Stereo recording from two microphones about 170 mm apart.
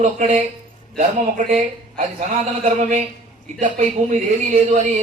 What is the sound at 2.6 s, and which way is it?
A man's voice, 40° right (ahead or behind).